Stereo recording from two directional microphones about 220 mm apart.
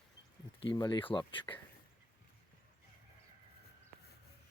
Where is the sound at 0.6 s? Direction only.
20° left (ahead or behind).